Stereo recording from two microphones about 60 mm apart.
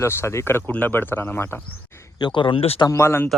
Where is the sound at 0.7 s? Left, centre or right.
Left.